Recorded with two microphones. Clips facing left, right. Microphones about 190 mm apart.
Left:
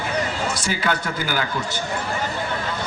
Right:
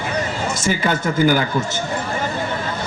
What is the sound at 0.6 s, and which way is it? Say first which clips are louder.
Speech: right 4 dB; 45° right (ahead or behind).